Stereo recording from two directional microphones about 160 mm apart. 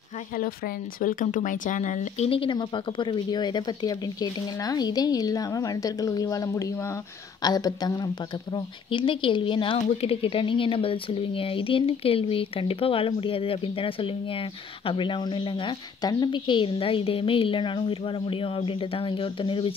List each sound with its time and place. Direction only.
1.0 s a woman's voice: 55° left (ahead or behind); by 19.7 s 30° left (ahead or behind)